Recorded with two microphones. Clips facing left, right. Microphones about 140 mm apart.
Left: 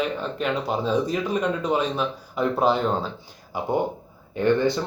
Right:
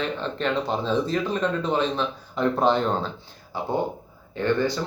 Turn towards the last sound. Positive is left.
turn(degrees=20)  # may be behind; listen again after turning